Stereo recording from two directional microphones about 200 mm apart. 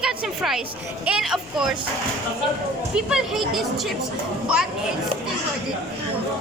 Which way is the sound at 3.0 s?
5° right (ahead or behind).